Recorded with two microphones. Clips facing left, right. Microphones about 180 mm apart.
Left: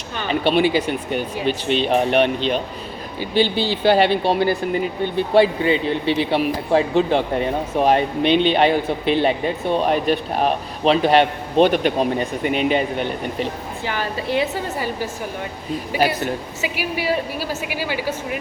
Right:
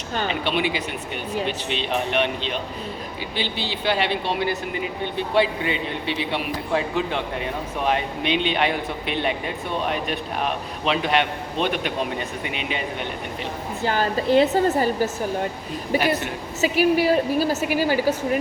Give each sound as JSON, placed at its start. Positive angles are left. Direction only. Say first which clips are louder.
{"t": 0.3, "sound": "a man's voice", "louder": "left 9 dB", "side_deg": 35}
{"t": 13.8, "sound": "a woman's voice", "louder": "right 4 dB", "side_deg": -45}
{"t": 17.0, "sound": "a woman's voice", "louder": "right 4 dB", "side_deg": -45}